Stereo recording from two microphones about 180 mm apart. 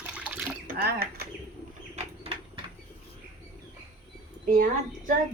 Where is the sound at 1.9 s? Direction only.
30° right (ahead or behind).